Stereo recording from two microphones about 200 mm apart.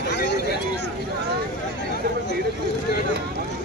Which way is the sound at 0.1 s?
60° left (ahead or behind).